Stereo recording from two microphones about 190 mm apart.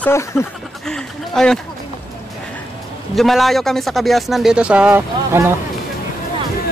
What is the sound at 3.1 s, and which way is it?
Speech, centre (ahead or behind).